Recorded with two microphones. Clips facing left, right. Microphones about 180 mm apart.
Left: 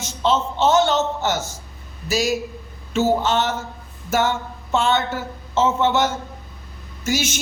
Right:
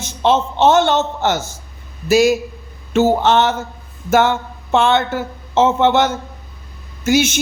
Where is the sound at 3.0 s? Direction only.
55° right (ahead or behind).